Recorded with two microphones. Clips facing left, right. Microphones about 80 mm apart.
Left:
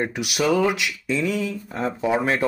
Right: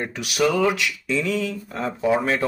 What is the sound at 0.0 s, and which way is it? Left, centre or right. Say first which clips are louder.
Speech: right 1 dB; centre.